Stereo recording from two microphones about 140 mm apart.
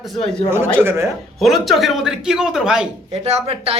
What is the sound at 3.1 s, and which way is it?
Speech, 50° right (ahead or behind).